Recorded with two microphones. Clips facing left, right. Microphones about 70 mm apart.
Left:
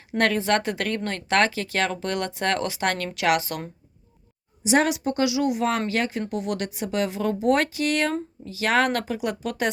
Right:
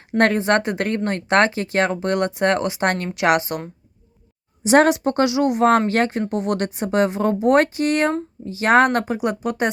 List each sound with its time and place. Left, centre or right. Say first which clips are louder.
0.2 s speech: right 5 dB; right
4.6 s a woman's voice: right 6 dB; right